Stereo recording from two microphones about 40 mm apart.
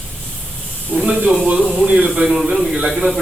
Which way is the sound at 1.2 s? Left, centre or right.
Right.